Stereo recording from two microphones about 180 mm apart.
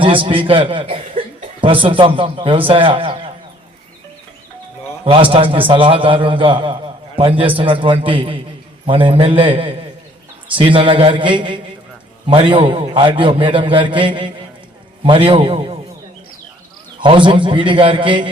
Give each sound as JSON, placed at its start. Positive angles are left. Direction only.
{"t": 0.0, "sound": "a man's voice", "side_deg": -30}
{"t": 5.0, "sound": "a man's voice", "side_deg": -30}
{"t": 17.0, "sound": "a man's voice", "side_deg": -25}